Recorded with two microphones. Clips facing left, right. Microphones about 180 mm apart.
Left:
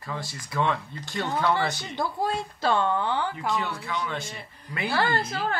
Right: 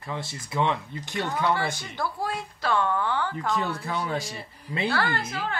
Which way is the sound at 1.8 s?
20° left (ahead or behind).